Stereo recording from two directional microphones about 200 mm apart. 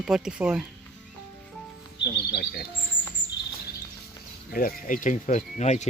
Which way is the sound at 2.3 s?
50° left (ahead or behind).